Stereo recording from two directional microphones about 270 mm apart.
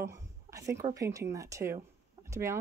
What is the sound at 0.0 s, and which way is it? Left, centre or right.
Speech, centre.